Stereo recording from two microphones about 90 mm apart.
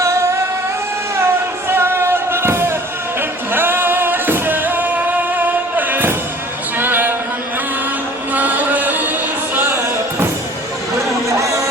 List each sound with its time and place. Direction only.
0.0 s music: 35° right (ahead or behind)
1.6 s music: 25° right (ahead or behind)
8.3 s music: 20° right (ahead or behind)
10.9 s a sound: 35° right (ahead or behind)